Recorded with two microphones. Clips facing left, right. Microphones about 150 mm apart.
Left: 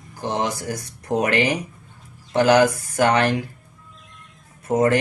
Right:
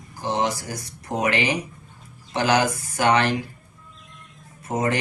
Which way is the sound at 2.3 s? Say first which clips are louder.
Left 5 dB; 50° left (ahead or behind).